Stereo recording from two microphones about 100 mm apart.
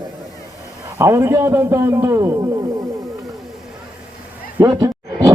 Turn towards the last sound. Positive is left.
turn(degrees=-40)  # may be behind; listen again after turning